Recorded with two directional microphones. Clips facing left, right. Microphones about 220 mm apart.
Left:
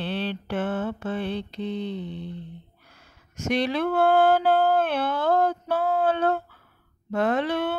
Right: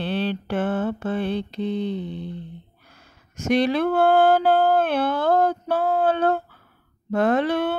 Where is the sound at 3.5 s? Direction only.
40° right (ahead or behind).